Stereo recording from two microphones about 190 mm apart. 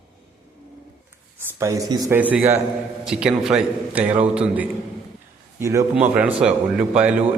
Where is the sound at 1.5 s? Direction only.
15° right (ahead or behind).